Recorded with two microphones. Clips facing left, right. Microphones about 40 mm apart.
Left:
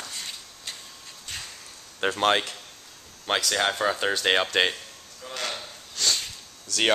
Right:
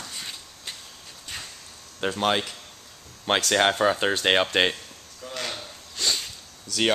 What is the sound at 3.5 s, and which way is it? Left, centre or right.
Speech, centre.